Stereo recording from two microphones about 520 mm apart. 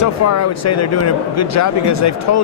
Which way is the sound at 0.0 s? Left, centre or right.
Left.